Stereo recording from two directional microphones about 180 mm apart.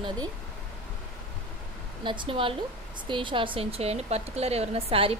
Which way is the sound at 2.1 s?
30° right (ahead or behind).